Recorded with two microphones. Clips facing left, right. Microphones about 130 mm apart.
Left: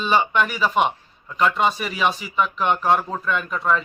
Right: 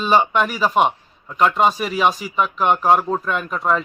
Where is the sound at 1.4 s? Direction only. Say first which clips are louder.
Right 3 dB; 40° right (ahead or behind).